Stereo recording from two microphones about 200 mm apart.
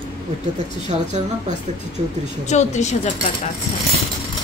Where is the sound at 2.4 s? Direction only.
35° left (ahead or behind).